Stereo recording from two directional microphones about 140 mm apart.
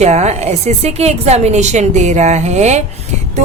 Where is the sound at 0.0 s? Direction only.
50° right (ahead or behind).